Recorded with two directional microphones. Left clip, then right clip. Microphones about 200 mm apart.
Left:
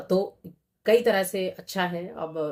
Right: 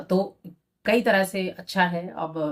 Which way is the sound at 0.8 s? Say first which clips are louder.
Even; 45° left (ahead or behind).